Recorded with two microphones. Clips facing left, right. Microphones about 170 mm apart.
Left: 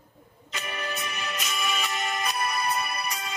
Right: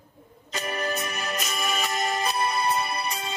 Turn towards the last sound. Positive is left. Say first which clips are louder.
# right 3 dB
turn(degrees=-30)  # may be behind; listen again after turning